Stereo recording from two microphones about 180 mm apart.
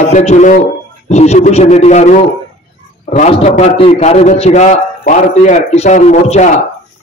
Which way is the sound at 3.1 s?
35° left (ahead or behind).